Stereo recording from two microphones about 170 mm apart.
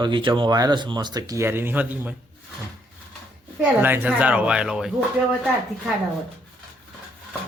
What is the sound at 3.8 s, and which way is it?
A woman's voice, 10° right (ahead or behind).